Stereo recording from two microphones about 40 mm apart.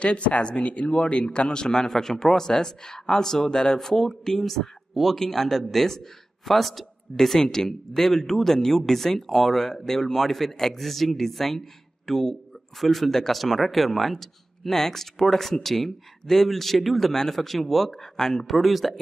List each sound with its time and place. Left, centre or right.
0.0 s speech: left; by 18.9 s centre